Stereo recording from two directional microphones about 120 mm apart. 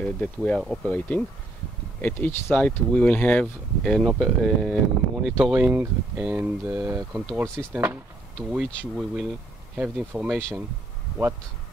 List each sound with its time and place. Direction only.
0.0 s speech: 10° left (ahead or behind)
4.0 s speech: 5° right (ahead or behind); by 7.0 s 20° right (ahead or behind)
7.4 s speech: 10° left (ahead or behind)
7.7 s speech: 20° right (ahead or behind)
8.5 s speech: 5° right (ahead or behind)